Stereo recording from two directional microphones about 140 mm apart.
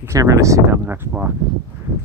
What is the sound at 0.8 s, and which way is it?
Speech, 10° right (ahead or behind).